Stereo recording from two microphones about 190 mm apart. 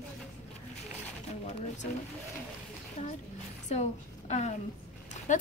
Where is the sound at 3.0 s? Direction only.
35° left (ahead or behind).